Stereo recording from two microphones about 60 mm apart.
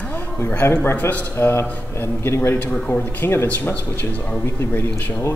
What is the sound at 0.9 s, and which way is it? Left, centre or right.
Mantra, left.